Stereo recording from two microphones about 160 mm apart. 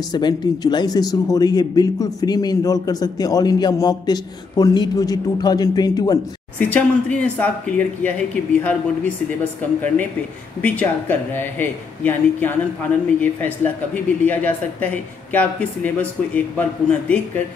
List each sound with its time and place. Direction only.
0.1 s speech: 25° left (ahead or behind)
6.6 s speech: 10° left (ahead or behind)